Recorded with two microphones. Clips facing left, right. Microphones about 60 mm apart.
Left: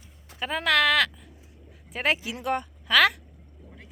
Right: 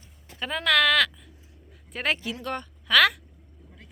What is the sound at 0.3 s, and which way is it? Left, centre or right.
Speech, centre.